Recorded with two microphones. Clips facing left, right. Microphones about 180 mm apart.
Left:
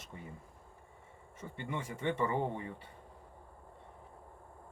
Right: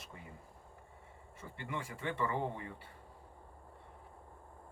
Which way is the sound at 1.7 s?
20° left (ahead or behind).